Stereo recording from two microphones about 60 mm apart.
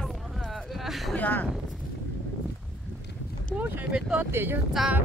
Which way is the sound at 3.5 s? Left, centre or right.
Centre.